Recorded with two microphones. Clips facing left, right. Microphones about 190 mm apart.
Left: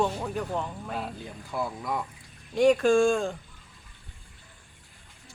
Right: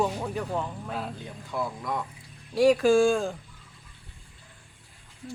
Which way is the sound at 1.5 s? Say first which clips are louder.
Even; centre (ahead or behind).